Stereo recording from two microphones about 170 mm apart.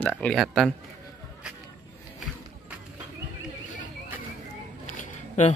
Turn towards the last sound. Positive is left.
turn(degrees=45)  # may be behind; listen again after turning